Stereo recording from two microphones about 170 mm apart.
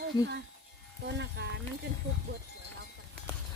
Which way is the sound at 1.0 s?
90° right.